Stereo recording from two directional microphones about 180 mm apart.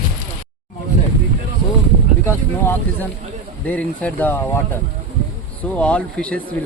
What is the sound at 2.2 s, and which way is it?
Speech, 10° left (ahead or behind).